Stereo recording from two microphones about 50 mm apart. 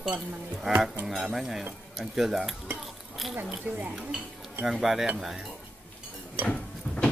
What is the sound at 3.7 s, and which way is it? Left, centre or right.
Speech, right.